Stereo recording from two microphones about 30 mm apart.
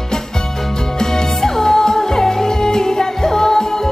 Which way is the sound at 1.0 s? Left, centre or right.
Centre.